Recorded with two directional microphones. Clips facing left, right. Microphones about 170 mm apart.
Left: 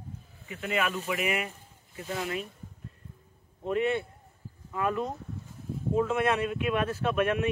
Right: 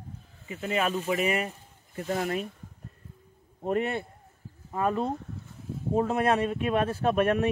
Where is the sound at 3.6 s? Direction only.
40° right (ahead or behind).